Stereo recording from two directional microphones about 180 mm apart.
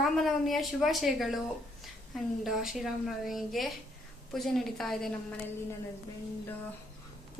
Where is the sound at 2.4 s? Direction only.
Centre (ahead or behind).